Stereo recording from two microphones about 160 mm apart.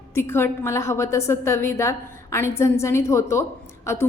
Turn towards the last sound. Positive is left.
turn(degrees=15)  # may be behind; listen again after turning